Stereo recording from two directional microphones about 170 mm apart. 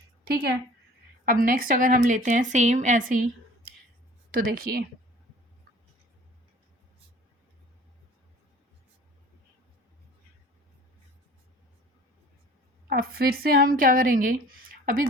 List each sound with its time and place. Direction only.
0.3 s a woman's voice: 60° right (ahead or behind)
4.4 s a woman's voice: 60° right (ahead or behind)
12.9 s a woman's voice: 60° right (ahead or behind)